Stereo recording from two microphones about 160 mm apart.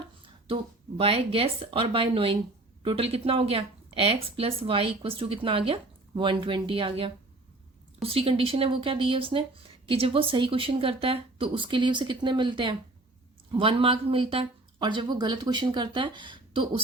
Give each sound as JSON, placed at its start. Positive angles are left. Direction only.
{"t": 0.4, "sound": "speech", "side_deg": -35}